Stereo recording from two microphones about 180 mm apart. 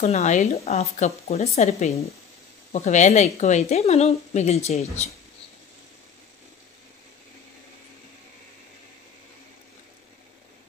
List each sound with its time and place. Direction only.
0.0 s speech: 40° left (ahead or behind)